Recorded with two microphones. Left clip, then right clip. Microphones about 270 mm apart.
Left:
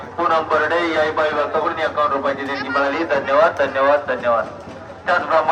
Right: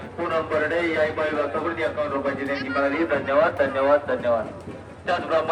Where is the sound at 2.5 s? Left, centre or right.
Centre.